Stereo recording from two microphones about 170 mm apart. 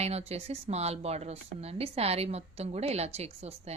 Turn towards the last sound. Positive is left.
turn(degrees=-40)  # may be behind; listen again after turning